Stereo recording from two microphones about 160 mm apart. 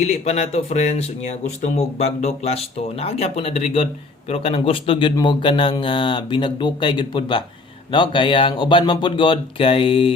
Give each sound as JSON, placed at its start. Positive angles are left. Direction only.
{"t": 0.0, "sound": "speech", "side_deg": 45}